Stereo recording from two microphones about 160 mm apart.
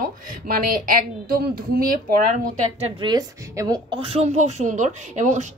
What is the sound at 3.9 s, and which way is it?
A woman's voice, 35° right (ahead or behind).